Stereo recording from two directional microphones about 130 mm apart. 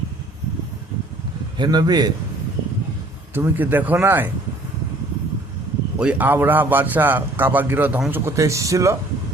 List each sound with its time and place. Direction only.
1.5 s a man's voice: 35° right (ahead or behind)
3.3 s a man's voice: 15° right (ahead or behind)
6.0 s a man's voice: 10° right (ahead or behind)